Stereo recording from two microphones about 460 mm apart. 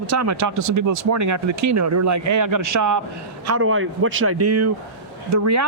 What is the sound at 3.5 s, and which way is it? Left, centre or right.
Speech, right.